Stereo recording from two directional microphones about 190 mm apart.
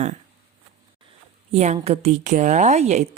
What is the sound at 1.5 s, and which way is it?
Speech, 35° right (ahead or behind).